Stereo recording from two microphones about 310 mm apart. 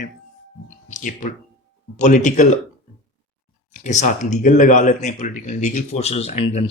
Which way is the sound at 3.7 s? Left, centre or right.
Left.